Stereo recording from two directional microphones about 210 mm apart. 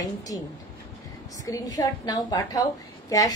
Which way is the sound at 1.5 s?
15° left (ahead or behind).